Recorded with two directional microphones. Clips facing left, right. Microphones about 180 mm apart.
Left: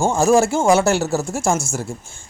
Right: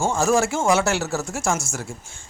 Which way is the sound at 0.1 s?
30° left (ahead or behind).